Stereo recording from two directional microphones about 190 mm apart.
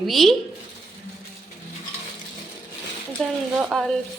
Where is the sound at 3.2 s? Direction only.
5° left (ahead or behind).